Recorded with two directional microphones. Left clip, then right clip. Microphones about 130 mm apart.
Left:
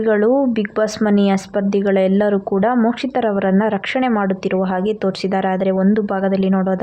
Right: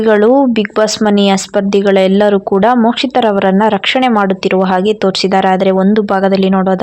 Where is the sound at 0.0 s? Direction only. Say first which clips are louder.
Right 7 dB; 25° right (ahead or behind).